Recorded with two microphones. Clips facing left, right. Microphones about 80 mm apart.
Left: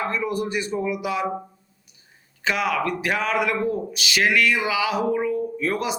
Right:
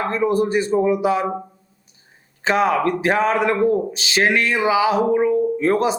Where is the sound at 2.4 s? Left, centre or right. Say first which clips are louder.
Right 6 dB; right.